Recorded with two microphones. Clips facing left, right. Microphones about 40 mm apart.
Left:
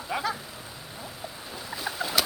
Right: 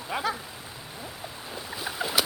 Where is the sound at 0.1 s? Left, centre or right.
Centre.